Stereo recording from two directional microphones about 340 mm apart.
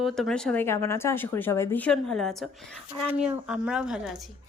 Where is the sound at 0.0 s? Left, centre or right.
Centre.